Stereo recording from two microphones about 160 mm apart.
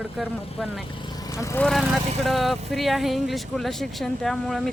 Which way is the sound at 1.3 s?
20° left (ahead or behind).